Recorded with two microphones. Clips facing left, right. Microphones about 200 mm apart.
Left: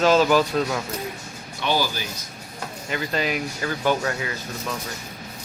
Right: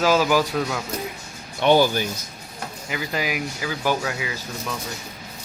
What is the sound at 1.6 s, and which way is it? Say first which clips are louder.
Speech: right 7 dB; 55° right (ahead or behind).